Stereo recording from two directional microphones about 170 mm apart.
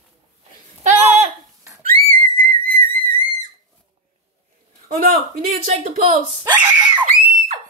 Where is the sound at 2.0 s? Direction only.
55° right (ahead or behind).